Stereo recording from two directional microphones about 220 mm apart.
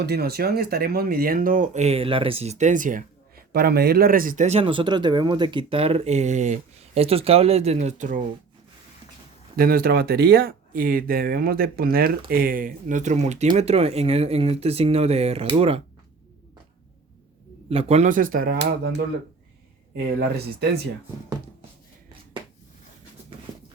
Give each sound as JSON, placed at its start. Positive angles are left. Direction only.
{"t": 0.0, "sound": "speech", "side_deg": -45}
{"t": 9.6, "sound": "speech", "side_deg": -45}
{"t": 17.7, "sound": "speech", "side_deg": -25}
{"t": 20.1, "sound": "speech", "side_deg": -45}